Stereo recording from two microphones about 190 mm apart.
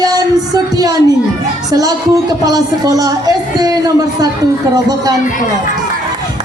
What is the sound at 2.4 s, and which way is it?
Speech, 20° right (ahead or behind).